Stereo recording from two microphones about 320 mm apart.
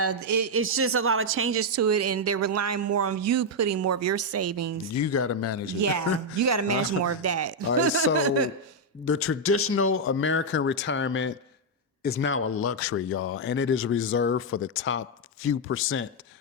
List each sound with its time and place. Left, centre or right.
0.0 s a man's voice: right
0.5 s speech: right
4.9 s speech: left
5.8 s a man's voice: right
9.0 s speech: left